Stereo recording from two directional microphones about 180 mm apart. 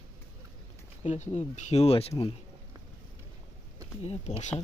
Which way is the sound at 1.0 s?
40° left (ahead or behind).